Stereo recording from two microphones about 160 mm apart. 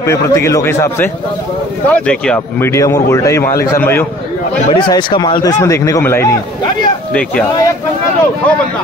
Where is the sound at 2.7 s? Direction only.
15° left (ahead or behind).